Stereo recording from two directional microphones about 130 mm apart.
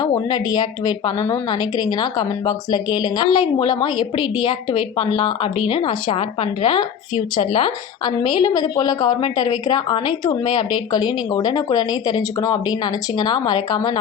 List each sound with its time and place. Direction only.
0.0 s a woman's voice: 30° left (ahead or behind)